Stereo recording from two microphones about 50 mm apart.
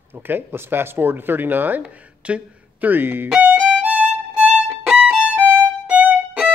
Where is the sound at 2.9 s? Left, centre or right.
Right.